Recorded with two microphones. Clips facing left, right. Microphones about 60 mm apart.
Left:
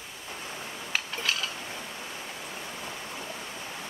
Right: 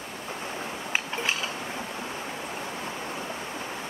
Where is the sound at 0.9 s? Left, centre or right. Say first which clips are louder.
Right 2 dB; right.